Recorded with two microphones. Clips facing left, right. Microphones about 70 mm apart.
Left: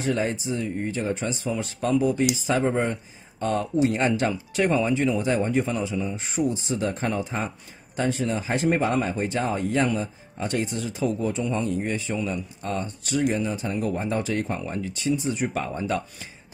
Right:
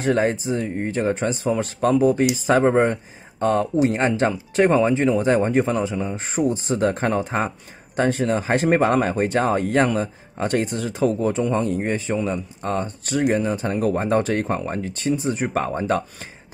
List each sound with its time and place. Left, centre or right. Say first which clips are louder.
0.0 s speech: right 5 dB; right